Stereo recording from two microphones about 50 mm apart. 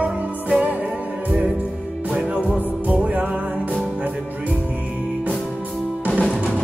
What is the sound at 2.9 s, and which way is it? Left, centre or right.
Music, right.